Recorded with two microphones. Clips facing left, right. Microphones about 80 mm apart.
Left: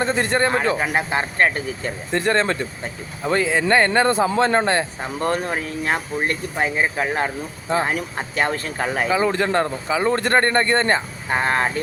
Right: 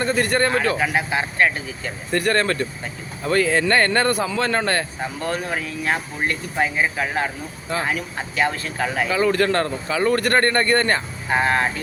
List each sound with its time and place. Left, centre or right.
0.0 s a man's voice: left
0.9 s speech: left
2.1 s a man's voice: left
5.2 s a man's voice: left
7.9 s speech: left
9.0 s a man's voice: left